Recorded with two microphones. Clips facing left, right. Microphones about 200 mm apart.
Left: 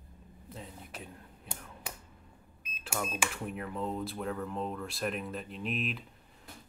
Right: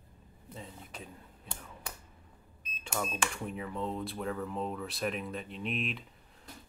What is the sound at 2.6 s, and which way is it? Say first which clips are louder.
Speech: even; 5° left (ahead or behind).